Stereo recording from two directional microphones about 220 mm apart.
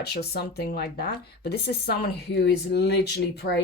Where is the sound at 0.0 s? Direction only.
45° left (ahead or behind).